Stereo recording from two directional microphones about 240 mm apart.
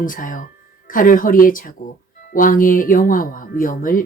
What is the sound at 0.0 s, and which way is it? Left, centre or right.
Speech, left.